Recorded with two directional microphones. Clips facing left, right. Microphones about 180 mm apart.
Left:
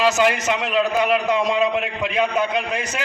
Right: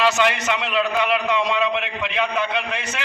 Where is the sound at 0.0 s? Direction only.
40° left (ahead or behind).